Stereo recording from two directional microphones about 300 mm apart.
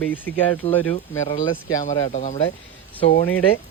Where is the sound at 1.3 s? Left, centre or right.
Left.